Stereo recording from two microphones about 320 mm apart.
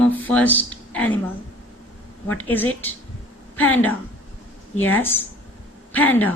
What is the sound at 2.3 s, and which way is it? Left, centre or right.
Speech, centre.